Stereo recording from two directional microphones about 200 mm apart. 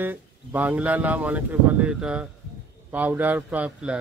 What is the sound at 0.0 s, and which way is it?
Speech, 10° right (ahead or behind).